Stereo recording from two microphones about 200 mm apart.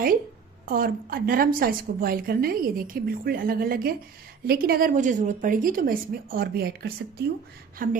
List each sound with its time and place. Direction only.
0.7 s a woman's voice: 50° right (ahead or behind)